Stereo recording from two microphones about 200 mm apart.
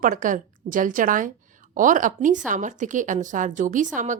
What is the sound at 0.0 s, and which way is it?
A woman's voice, 40° right (ahead or behind).